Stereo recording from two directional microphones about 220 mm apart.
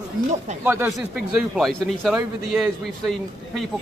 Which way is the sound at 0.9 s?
Centre (ahead or behind).